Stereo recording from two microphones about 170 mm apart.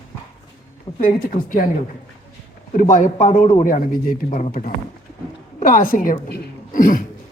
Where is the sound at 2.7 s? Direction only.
50° left (ahead or behind).